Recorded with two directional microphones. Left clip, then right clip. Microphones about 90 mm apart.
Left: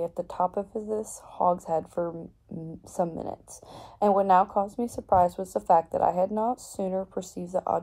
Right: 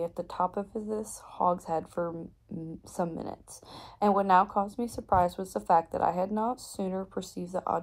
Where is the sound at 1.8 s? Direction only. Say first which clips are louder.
Left 3 dB; 40° right (ahead or behind).